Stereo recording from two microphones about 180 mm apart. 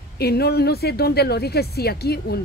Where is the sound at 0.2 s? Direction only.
65° left (ahead or behind).